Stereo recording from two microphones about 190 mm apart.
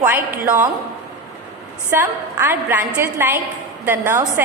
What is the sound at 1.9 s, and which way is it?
A woman's voice, 10° right (ahead or behind).